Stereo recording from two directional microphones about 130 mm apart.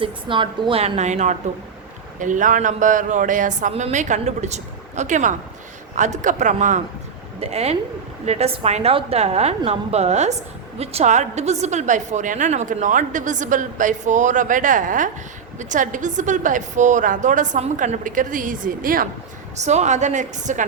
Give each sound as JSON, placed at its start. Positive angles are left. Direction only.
{"t": 0.0, "sound": "a woman's voice", "side_deg": -40}
{"t": 2.1, "sound": "speech", "side_deg": -80}
{"t": 3.7, "sound": "a woman's voice", "side_deg": -60}
{"t": 7.3, "sound": "a woman's voice", "side_deg": -55}
{"t": 15.5, "sound": "a woman's voice", "side_deg": -75}
{"t": 19.5, "sound": "a woman's voice", "side_deg": -60}